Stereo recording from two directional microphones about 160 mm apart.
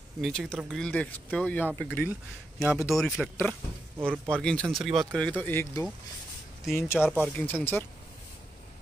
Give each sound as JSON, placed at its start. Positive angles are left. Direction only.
{"t": 0.2, "sound": "speech", "side_deg": 0}
{"t": 2.6, "sound": "speech", "side_deg": -5}
{"t": 4.4, "sound": "speech", "side_deg": 5}
{"t": 7.0, "sound": "speech", "side_deg": -5}
{"t": 7.3, "sound": "speech", "side_deg": 10}